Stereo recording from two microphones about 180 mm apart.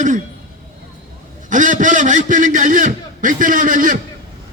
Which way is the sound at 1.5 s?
45° right (ahead or behind).